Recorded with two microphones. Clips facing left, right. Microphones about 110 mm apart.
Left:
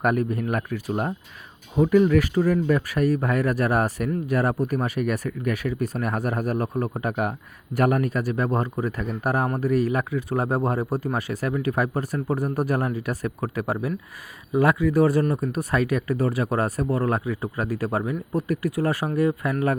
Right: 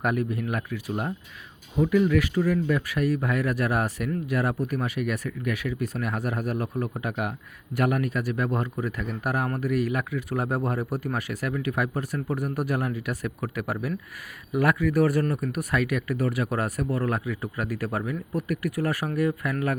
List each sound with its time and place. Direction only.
0.0 s speech: 45° left (ahead or behind); by 19.7 s 30° left (ahead or behind)